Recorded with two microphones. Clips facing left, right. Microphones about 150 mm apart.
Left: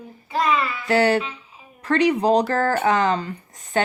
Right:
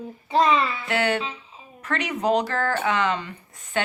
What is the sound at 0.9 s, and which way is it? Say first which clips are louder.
A woman's voice: left 10 dB; 35° left (ahead or behind).